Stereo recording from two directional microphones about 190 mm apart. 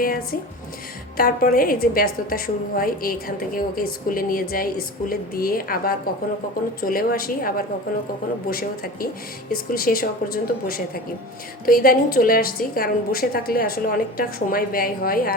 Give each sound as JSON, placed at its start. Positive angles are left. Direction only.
{"t": 0.0, "sound": "a woman's voice", "side_deg": 50}